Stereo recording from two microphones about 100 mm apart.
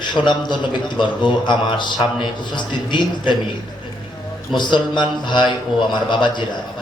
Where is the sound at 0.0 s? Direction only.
50° left (ahead or behind).